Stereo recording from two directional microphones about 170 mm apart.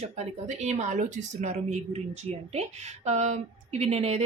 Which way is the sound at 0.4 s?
40° right (ahead or behind).